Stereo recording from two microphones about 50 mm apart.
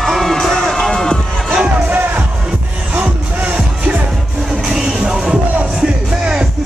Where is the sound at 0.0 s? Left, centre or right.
Centre.